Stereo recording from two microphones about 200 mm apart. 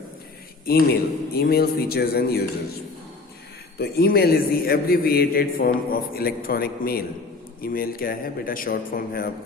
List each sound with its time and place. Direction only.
0.6 s a man's voice: 50° left (ahead or behind)
3.8 s a man's voice: 50° left (ahead or behind)